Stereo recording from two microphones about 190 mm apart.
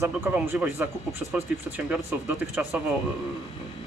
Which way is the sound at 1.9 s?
10° right (ahead or behind).